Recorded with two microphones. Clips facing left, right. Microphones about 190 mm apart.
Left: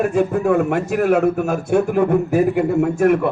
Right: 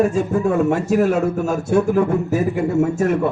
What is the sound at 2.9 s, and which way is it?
Speech, 60° left (ahead or behind).